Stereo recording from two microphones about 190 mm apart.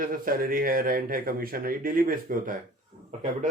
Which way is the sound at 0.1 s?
50° right (ahead or behind).